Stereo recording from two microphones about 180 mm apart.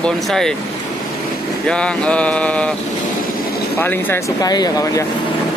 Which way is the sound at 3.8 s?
10° left (ahead or behind).